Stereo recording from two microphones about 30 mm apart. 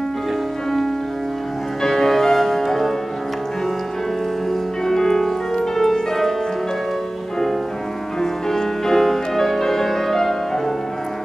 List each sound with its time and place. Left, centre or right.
1.8 s music: centre
4.8 s music: centre
8.2 s music: centre